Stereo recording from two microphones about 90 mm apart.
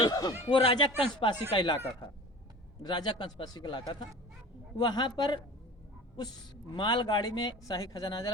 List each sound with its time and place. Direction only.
0.0 s speech: 45° left (ahead or behind)
0.4 s speech: 75° left (ahead or behind); by 1.7 s 60° left (ahead or behind)
2.8 s speech: 55° left (ahead or behind)
6.7 s speech: 55° left (ahead or behind)
7.7 s speech: 40° left (ahead or behind)